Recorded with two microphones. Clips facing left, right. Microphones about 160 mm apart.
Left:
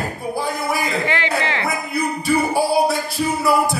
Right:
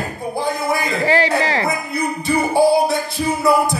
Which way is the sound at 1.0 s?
35° right (ahead or behind).